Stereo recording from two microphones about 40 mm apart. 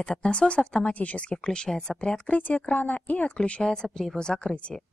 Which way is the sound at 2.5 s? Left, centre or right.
Left.